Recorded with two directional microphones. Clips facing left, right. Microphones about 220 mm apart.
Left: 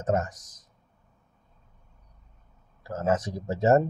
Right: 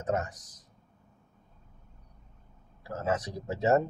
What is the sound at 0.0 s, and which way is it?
Speech, 45° left (ahead or behind).